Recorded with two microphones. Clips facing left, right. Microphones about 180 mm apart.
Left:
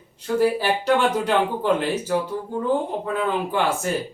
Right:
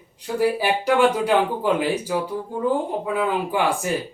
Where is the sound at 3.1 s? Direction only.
10° right (ahead or behind).